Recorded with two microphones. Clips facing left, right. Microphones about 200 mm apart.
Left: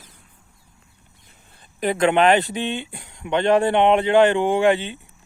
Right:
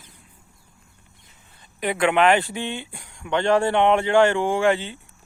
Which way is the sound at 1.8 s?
40° left (ahead or behind).